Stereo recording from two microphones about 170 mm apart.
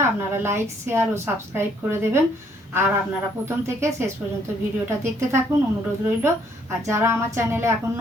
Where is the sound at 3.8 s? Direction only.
15° right (ahead or behind).